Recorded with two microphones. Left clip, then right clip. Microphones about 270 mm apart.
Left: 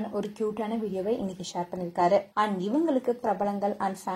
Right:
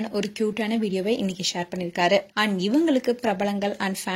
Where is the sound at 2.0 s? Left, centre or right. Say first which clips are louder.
Right 2 dB; right.